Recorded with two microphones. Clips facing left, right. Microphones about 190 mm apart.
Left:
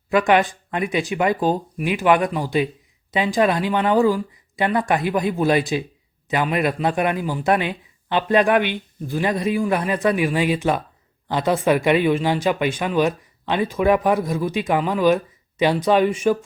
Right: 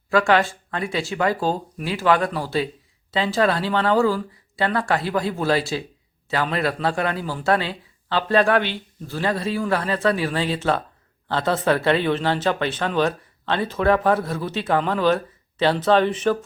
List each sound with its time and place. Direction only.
0.1 s speech: 20° left (ahead or behind)